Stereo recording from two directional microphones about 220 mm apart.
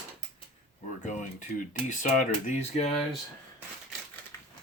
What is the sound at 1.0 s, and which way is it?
Speech, 35° left (ahead or behind).